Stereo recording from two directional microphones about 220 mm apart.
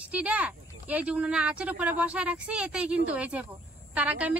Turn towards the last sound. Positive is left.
turn(degrees=-5)  # may be behind; listen again after turning